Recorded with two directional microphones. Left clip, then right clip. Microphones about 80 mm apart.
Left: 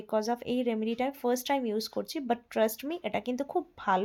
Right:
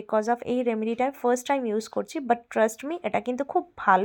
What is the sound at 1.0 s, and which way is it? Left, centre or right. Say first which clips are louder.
Speech: right 8 dB; right.